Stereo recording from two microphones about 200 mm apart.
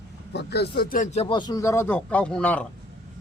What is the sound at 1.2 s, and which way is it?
Speech, 25° left (ahead or behind).